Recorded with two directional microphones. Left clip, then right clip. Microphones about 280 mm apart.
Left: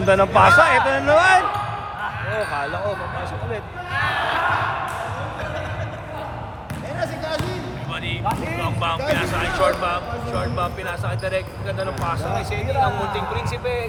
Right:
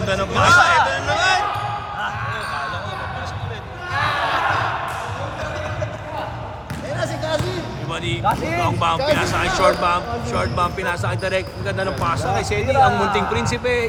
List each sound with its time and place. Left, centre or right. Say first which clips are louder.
0.1 s speech: left 6 dB; left
0.4 s speech: right 3 dB; centre
0.9 s music: left 3 dB; left
3.9 s a sound: right 2 dB; centre
8.6 s a sound: right 4 dB; centre
9.1 s speech: right 2 dB; right